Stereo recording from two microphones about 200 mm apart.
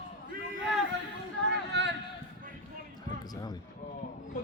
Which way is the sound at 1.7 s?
60° right (ahead or behind).